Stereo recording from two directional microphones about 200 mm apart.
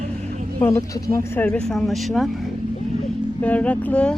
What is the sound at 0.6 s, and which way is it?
Speech, 15° left (ahead or behind).